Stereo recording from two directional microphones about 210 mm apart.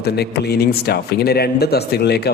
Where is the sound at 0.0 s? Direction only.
50° left (ahead or behind).